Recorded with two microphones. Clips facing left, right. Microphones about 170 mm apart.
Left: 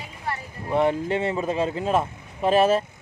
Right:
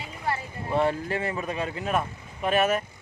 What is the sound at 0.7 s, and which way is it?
Speech, 20° left (ahead or behind).